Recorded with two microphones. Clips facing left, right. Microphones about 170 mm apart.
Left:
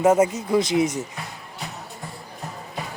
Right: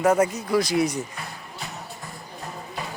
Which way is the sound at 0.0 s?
25° left (ahead or behind).